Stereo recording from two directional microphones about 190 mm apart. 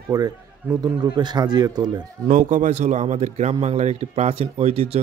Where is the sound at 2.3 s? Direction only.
40° right (ahead or behind).